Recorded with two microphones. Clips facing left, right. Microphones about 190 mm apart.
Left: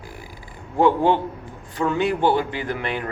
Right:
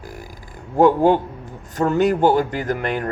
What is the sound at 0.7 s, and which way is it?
Speech, 45° right (ahead or behind).